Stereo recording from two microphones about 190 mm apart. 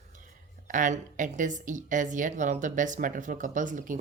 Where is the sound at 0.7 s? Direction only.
40° right (ahead or behind).